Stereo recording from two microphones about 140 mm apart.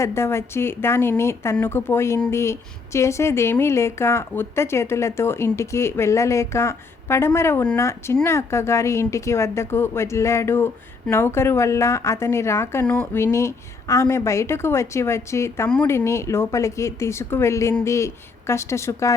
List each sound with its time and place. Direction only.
0.0 s a woman's voice: 20° left (ahead or behind)